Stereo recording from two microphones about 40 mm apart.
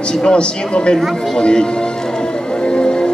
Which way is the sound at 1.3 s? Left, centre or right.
Left.